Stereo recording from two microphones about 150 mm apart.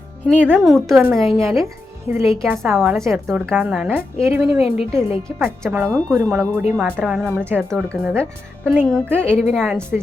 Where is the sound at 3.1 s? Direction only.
Centre (ahead or behind).